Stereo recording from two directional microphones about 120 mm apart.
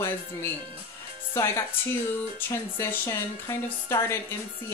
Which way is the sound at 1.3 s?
20° left (ahead or behind).